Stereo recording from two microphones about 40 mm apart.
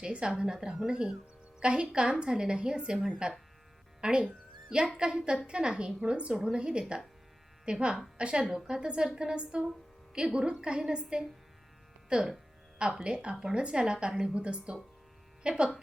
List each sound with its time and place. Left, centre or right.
0.0 s a woman's voice: right